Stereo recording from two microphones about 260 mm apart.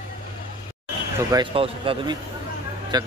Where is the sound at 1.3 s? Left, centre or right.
Centre.